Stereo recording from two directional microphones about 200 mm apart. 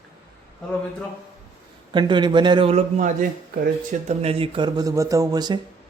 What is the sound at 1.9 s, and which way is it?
A man's voice, 25° right (ahead or behind).